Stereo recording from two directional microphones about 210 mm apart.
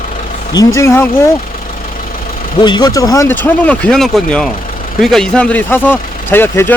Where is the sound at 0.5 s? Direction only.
15° left (ahead or behind).